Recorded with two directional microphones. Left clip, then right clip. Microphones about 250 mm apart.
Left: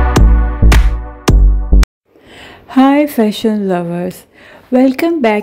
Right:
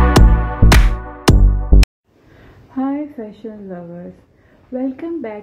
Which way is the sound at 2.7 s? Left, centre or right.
Left.